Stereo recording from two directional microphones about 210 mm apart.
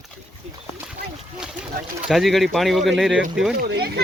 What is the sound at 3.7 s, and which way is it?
Speech, 50° right (ahead or behind).